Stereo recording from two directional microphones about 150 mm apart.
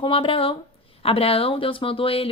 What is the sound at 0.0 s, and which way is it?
Speech, 35° left (ahead or behind).